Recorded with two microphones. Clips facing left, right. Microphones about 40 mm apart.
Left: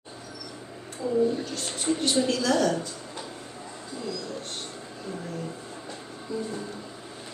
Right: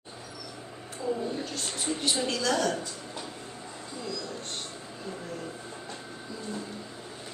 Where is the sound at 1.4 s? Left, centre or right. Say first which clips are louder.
Left 2 dB; centre.